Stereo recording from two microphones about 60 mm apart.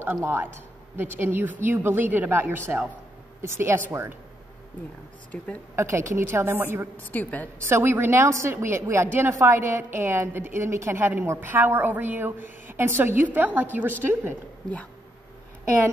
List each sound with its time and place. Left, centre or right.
0.0 s a woman's voice: right
3.3 s a woman's voice: right
5.3 s a woman's voice: centre
5.8 s a woman's voice: right
7.1 s a woman's voice: left
7.5 s a woman's voice: right